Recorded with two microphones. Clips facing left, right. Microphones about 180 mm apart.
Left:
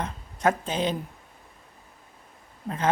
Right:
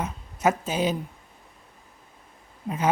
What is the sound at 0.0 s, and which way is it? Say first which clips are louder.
Speech: right 1 dB; 5° right (ahead or behind).